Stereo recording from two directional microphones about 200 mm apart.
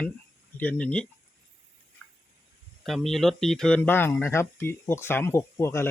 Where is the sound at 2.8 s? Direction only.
Centre (ahead or behind).